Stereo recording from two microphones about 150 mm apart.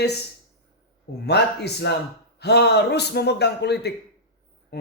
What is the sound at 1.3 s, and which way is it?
A man's voice, 90° left.